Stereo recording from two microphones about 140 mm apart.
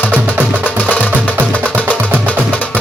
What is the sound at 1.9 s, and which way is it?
Music, 10° right (ahead or behind).